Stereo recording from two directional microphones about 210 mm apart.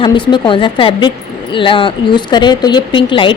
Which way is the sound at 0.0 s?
20° left (ahead or behind).